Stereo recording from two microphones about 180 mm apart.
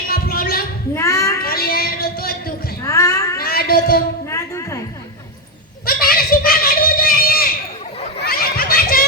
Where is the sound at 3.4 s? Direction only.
55° left (ahead or behind).